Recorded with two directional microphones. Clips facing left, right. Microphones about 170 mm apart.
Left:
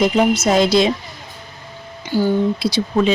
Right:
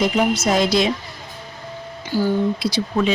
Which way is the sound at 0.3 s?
25° left (ahead or behind).